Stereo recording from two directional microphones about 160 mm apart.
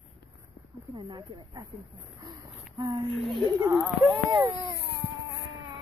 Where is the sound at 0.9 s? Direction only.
30° right (ahead or behind).